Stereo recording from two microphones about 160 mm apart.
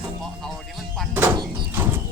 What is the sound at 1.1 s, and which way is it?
Speech, 10° right (ahead or behind).